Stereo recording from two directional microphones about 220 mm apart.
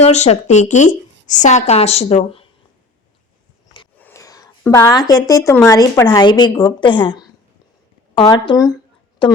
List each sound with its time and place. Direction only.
0.0 s a woman's voice: 30° left (ahead or behind)
4.0 s a sound: 15° left (ahead or behind)
5.5 s a woman's voice: 15° left (ahead or behind)